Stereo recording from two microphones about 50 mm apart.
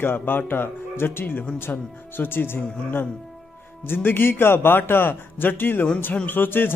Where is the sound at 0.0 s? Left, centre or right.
Left.